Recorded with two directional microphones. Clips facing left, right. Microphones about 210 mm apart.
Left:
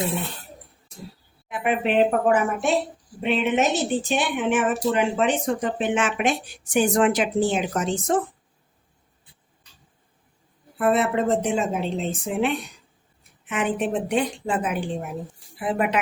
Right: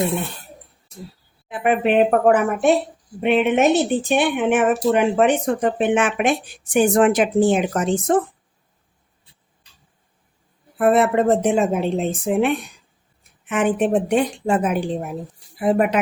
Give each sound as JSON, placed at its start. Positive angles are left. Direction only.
{"t": 1.6, "sound": "a woman's voice", "side_deg": -55}
{"t": 10.8, "sound": "a woman's voice", "side_deg": -55}